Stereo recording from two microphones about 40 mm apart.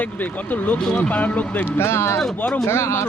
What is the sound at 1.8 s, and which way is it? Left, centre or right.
Speech, left.